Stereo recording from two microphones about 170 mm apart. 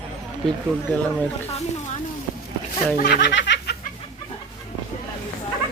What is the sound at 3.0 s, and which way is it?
Snicker, 65° left (ahead or behind).